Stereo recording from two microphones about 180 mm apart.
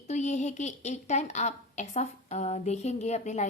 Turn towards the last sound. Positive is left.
turn(degrees=40)  # may be behind; listen again after turning